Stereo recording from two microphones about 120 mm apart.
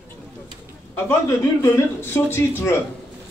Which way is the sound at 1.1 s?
25° left (ahead or behind).